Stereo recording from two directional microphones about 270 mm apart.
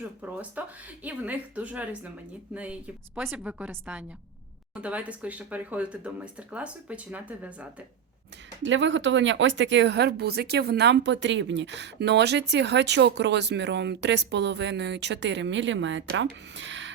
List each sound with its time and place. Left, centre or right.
0.2 s speech: centre
8.6 s speech: right